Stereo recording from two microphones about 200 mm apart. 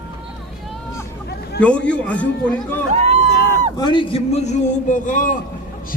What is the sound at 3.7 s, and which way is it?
A man's voice, 20° left (ahead or behind).